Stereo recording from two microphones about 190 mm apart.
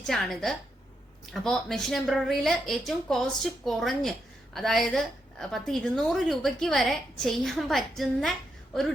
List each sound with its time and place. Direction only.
0.0 s a woman's voice: centre (ahead or behind)